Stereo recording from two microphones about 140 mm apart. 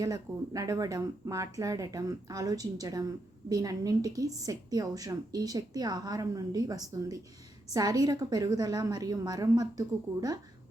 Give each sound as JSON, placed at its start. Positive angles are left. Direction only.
{"t": 0.0, "sound": "a woman's voice", "side_deg": -25}